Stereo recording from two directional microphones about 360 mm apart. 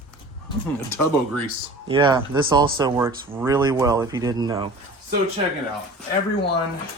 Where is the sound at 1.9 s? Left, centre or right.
Centre.